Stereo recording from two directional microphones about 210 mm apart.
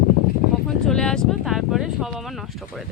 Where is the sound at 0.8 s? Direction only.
5° left (ahead or behind).